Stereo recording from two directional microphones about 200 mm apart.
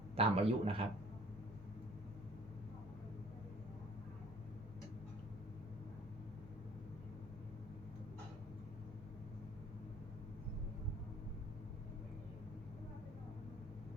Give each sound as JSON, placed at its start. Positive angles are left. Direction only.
{"t": 0.2, "sound": "a man's voice", "side_deg": -30}